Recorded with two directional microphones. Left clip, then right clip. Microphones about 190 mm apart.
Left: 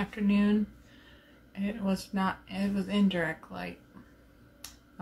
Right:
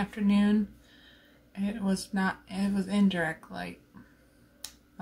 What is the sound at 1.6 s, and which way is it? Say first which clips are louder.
Speech: even; 15° right (ahead or behind).